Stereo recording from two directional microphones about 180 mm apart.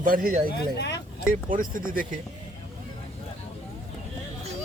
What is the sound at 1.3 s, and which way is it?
Speech, 50° right (ahead or behind).